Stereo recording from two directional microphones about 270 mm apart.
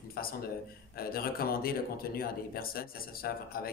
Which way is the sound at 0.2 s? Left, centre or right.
Left.